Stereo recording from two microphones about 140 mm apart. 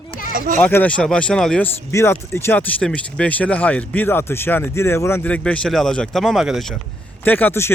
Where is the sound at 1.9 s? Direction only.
20° left (ahead or behind); by 6.8 s centre (ahead or behind).